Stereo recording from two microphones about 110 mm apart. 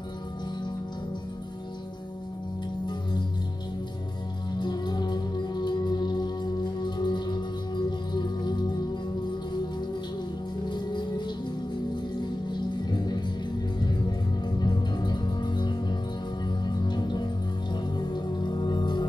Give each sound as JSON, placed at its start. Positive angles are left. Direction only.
{"t": 2.9, "sound": "music", "side_deg": 45}
{"t": 4.6, "sound": "music", "side_deg": 40}
{"t": 10.7, "sound": "music", "side_deg": 40}
{"t": 14.6, "sound": "music", "side_deg": 40}